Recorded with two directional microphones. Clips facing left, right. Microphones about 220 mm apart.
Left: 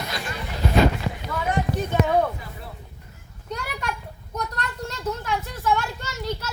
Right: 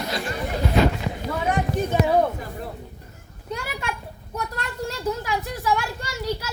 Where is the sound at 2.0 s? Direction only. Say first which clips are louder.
Right 1 dB; 35° right (ahead or behind).